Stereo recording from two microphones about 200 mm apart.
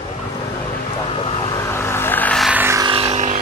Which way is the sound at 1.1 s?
30° left (ahead or behind).